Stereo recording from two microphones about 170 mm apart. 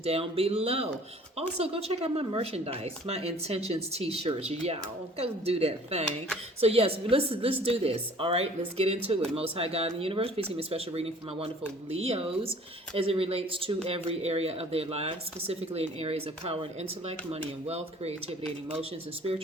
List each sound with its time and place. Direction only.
0.0 s speech: 35° right (ahead or behind)